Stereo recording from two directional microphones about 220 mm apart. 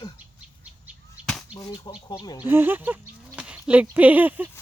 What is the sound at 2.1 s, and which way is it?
Speech, 20° left (ahead or behind).